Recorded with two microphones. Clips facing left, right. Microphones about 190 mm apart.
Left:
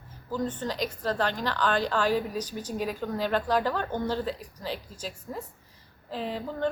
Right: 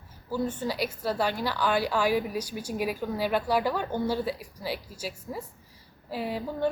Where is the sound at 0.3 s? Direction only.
10° right (ahead or behind).